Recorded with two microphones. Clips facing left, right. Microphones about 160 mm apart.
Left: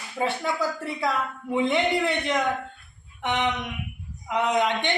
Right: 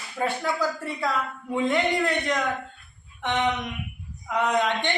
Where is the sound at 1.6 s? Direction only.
20° left (ahead or behind).